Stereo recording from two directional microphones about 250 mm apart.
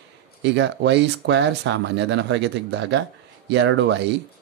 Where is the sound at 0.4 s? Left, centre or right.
Right.